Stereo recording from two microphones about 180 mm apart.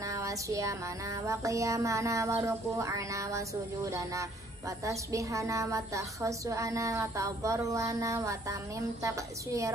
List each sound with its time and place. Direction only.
0.0 s music: 20° right (ahead or behind)